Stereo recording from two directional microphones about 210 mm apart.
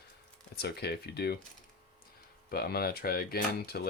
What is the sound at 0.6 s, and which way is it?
Speech, 50° left (ahead or behind).